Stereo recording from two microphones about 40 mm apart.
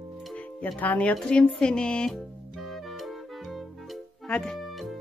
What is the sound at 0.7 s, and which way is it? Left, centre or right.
Speech, left.